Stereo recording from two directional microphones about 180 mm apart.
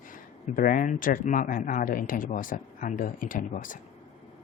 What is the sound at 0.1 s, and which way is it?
Speech, 45° left (ahead or behind).